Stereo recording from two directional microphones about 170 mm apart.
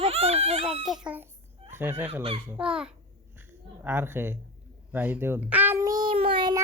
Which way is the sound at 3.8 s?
10° right (ahead or behind).